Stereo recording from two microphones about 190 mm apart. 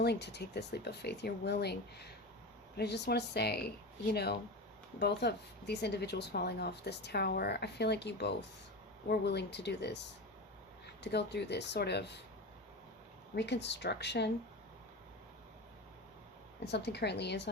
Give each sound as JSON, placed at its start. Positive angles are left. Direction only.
{"t": 0.0, "sound": "speech", "side_deg": 60}
{"t": 11.0, "sound": "speech", "side_deg": 65}
{"t": 13.3, "sound": "speech", "side_deg": 65}
{"t": 16.6, "sound": "speech", "side_deg": 60}